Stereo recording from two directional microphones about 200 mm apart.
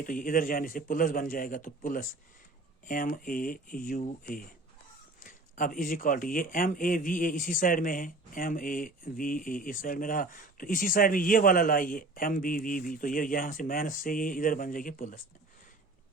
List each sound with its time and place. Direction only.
0.0 s speech: 45° left (ahead or behind)